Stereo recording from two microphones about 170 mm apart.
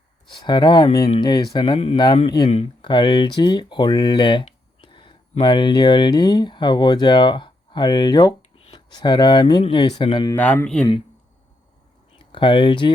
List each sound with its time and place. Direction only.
0.3 s speech: 25° left (ahead or behind)
10.3 s a man's voice: 10° left (ahead or behind)
12.2 s speech: 30° left (ahead or behind)